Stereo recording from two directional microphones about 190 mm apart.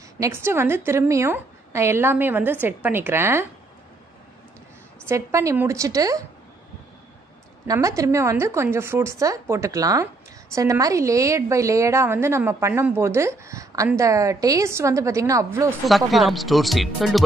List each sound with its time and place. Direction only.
0.2 s a woman's voice: 15° right (ahead or behind)
5.0 s a woman's voice: 15° right (ahead or behind)
7.6 s a woman's voice: 15° right (ahead or behind)
15.9 s speech: centre (ahead or behind)